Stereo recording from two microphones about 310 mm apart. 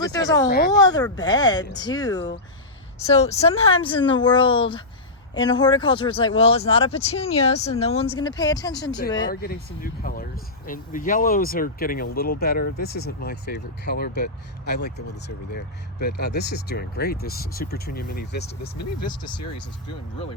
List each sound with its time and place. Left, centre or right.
0.0 s speech: centre
9.3 s speech: left